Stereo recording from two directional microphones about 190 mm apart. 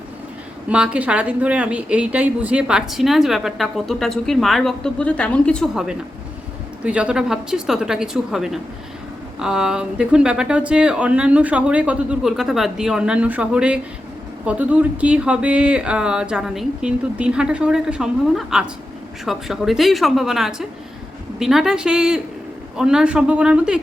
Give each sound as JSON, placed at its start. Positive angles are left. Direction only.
{"t": 0.7, "sound": "a woman's voice", "side_deg": -5}